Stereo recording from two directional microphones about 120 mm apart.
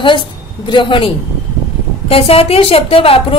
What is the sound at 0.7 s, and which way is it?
A woman's voice, 40° left (ahead or behind).